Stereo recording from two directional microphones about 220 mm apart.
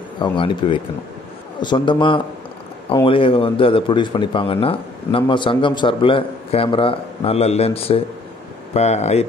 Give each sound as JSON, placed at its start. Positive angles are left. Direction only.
{"t": 0.2, "sound": "speech", "side_deg": 20}